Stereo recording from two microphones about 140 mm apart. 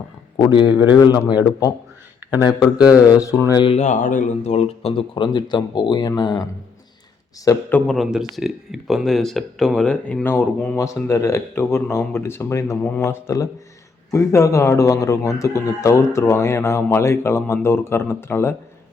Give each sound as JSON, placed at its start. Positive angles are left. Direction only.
{"t": 0.3, "sound": "speech", "side_deg": 30}
{"t": 2.4, "sound": "speech", "side_deg": 30}
{"t": 3.5, "sound": "speech", "side_deg": 35}
{"t": 3.8, "sound": "speech", "side_deg": 65}
{"t": 7.4, "sound": "speech", "side_deg": 20}
{"t": 7.9, "sound": "speech", "side_deg": 0}